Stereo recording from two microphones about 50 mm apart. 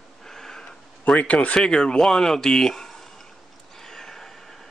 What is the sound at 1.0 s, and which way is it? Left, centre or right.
Speech, left.